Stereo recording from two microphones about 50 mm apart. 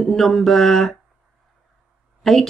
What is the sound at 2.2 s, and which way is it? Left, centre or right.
Speech, centre.